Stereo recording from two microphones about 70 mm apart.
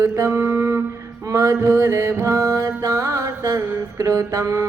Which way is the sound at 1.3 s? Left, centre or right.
Right.